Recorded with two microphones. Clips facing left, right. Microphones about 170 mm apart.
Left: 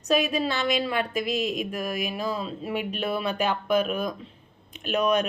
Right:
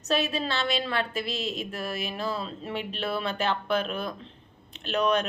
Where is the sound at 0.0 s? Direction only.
15° left (ahead or behind).